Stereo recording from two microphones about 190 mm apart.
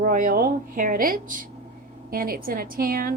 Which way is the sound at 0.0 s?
45° right (ahead or behind).